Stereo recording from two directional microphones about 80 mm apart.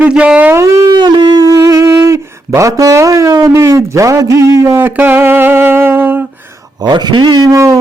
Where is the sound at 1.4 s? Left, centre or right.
Right.